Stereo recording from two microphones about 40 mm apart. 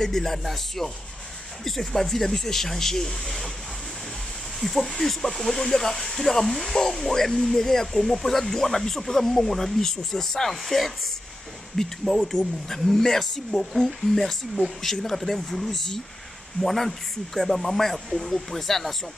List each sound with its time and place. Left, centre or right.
0.0 s speech: centre
4.6 s speech: centre
15.7 s speech: centre